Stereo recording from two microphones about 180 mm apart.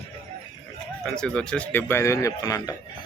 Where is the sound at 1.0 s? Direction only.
5° left (ahead or behind).